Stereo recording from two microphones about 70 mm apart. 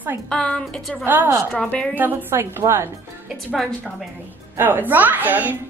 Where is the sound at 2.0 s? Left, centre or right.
Right.